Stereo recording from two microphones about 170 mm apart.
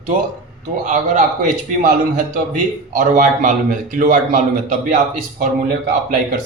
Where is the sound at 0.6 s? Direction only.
45° right (ahead or behind).